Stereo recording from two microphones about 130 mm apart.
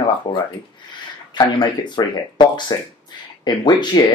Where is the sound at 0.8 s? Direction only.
35° left (ahead or behind).